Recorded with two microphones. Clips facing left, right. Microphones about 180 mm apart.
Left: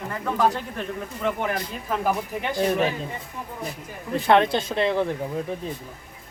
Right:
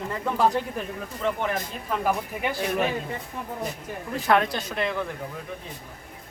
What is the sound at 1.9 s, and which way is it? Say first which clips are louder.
Speech: left 1 dB; centre (ahead or behind).